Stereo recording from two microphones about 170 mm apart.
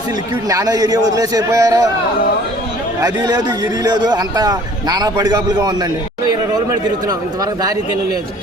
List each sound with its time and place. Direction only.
0.4 s a man's voice: 20° right (ahead or behind)
3.0 s a man's voice: 25° right (ahead or behind)